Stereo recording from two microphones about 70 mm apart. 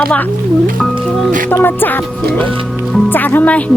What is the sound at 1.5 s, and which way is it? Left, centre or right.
Speech, left.